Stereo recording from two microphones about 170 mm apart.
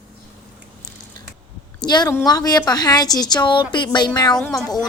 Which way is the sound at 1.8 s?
25° left (ahead or behind).